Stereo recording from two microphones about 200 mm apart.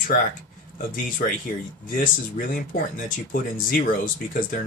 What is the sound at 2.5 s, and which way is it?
Speech, 40° left (ahead or behind).